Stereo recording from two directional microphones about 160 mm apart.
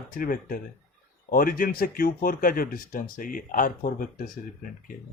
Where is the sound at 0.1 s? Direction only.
65° left (ahead or behind).